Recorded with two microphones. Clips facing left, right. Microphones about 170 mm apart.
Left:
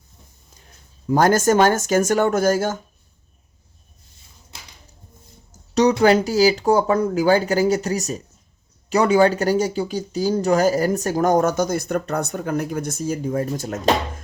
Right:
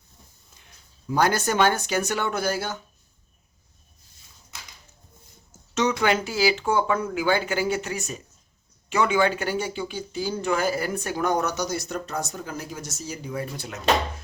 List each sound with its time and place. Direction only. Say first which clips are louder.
0.5 s speech: left 4 dB; 40° left (ahead or behind)
4.5 s a sound: left 1 dB; 30° left (ahead or behind)
5.5 s speech: left 7 dB; 40° left (ahead or behind)